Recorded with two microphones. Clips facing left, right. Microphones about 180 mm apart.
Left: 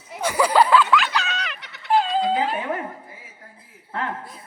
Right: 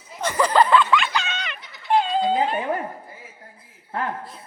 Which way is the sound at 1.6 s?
70° left (ahead or behind).